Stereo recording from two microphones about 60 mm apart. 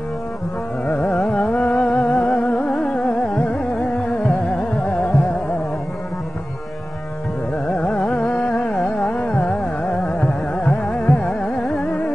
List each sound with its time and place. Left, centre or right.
0.8 s carnatic music: left
1.8 s music: centre
7.8 s carnatic music: left